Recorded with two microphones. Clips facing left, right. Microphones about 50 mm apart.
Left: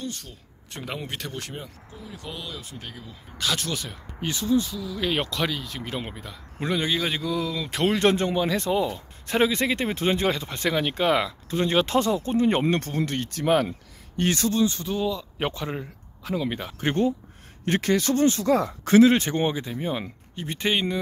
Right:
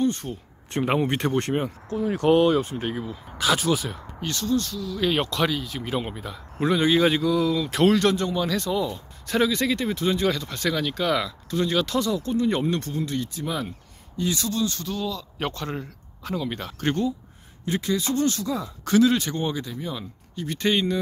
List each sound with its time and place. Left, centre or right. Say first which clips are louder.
0.0 s speech: right 11 dB; right
1.9 s speech: right 18 dB; right
3.1 s speech: right 3 dB; centre
4.2 s speech: left 2 dB; centre
8.1 s speech: left 1 dB; left
12.7 s speech: left 1 dB; left
14.3 s speech: left 4 dB; left; by 16.9 s centre
17.6 s speech: left 3 dB; left
18.9 s speech: left 3 dB; left